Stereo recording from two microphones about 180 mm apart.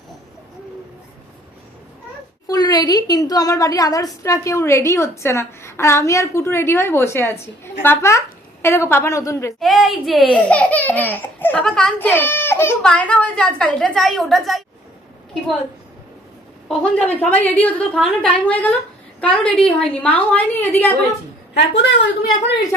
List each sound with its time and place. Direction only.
2.5 s a woman's voice: 20° left (ahead or behind)
9.6 s a woman's voice: centre (ahead or behind)
16.6 s a woman's voice: 10° left (ahead or behind)
21.5 s a woman's voice: 70° left (ahead or behind)